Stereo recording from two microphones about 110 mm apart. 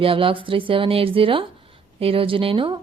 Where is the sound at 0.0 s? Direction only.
55° right (ahead or behind).